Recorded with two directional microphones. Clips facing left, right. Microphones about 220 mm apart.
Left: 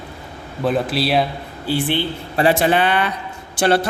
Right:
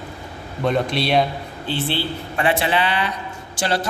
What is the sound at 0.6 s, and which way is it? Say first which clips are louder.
Speech: left 1 dB; 5° left (ahead or behind).